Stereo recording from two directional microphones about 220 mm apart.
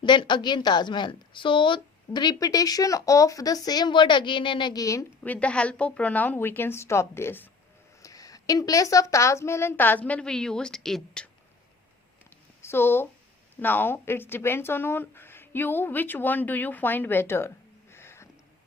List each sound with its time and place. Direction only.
0.0 s a woman's voice: 20° left (ahead or behind); by 11.3 s 5° left (ahead or behind)
12.6 s a woman's voice: 10° left (ahead or behind)
17.9 s a sound: 10° left (ahead or behind)